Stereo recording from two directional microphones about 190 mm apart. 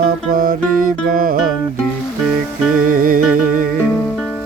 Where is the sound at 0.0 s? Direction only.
45° right (ahead or behind).